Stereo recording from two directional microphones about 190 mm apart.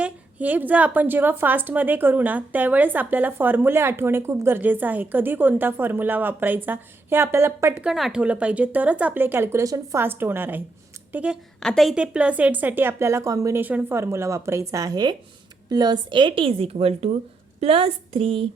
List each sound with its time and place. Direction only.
0.0 s a woman's voice: 10° right (ahead or behind); by 18.4 s 30° right (ahead or behind)